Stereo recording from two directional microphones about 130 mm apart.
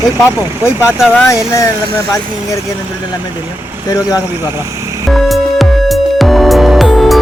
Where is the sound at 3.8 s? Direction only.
30° left (ahead or behind).